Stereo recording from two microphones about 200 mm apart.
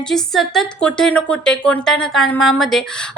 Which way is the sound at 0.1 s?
Centre (ahead or behind).